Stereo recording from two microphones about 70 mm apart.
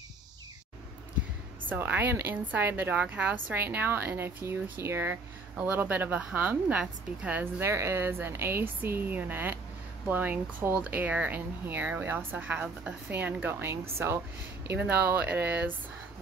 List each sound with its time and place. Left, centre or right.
1.7 s a woman's voice: right
7.6 s a woman's voice: right
12.5 s a woman's voice: centre
13.1 s a woman's voice: right
13.5 s a woman's voice: right